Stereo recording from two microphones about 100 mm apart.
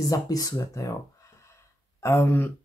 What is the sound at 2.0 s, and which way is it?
Speech, 25° left (ahead or behind).